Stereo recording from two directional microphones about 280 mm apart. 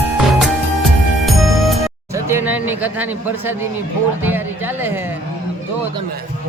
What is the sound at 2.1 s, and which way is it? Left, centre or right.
Speech, centre.